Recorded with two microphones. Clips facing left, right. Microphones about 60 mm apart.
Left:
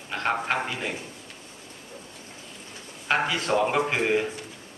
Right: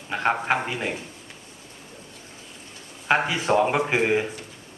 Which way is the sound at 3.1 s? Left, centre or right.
Centre.